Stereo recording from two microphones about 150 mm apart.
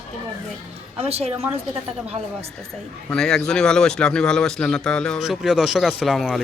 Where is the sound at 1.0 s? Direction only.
45° right (ahead or behind).